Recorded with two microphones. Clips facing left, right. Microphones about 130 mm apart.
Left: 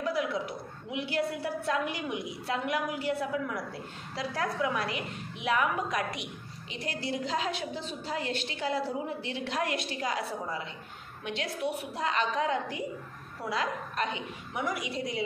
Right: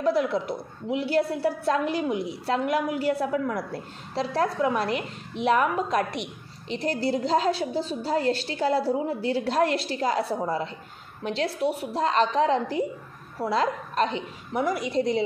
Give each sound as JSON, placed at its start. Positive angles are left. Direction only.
{"t": 0.3, "sound": "a woman's voice", "side_deg": -35}
{"t": 11.2, "sound": "a woman's voice", "side_deg": -35}